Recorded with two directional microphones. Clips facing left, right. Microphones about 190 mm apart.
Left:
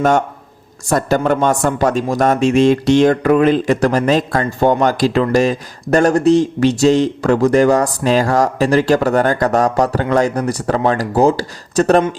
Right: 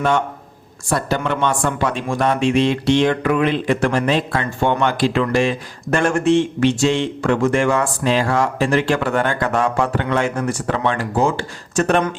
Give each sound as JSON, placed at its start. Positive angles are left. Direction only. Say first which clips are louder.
{"t": 0.9, "sound": "speech", "louder": "left 6 dB", "side_deg": 45}